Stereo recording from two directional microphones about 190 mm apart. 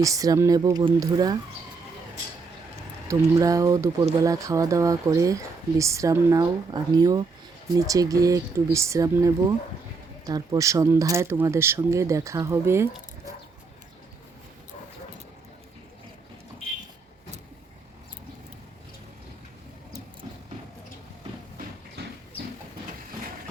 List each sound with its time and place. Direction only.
0.0 s speech: 15° right (ahead or behind)
3.1 s speech: 15° right (ahead or behind)